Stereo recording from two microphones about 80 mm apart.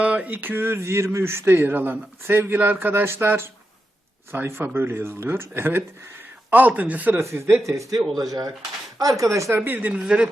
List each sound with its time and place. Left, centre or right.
0.0 s speech: centre
6.5 s speech: centre
7.2 s speech: right
7.7 s speech: right
9.6 s a man's voice: right